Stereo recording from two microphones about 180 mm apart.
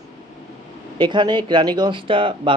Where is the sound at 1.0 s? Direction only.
25° right (ahead or behind).